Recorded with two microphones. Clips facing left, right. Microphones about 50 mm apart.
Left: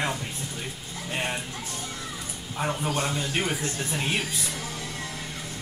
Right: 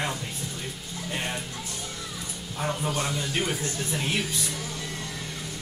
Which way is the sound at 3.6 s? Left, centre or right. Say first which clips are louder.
Left 1 dB; left.